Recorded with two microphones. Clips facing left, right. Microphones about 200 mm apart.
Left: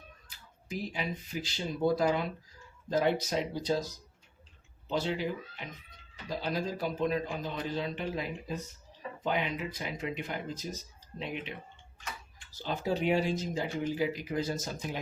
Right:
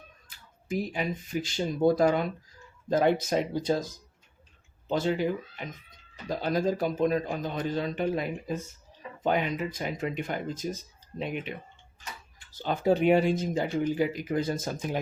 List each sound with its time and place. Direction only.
0.3 s speech: 50° right (ahead or behind)
4.9 s speech: 50° right (ahead or behind)
12.5 s speech: 55° right (ahead or behind)